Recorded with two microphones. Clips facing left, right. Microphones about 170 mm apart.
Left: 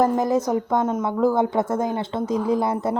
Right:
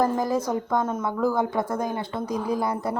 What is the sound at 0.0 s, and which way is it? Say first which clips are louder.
A woman's voice: left 4 dB; 20° left (ahead or behind).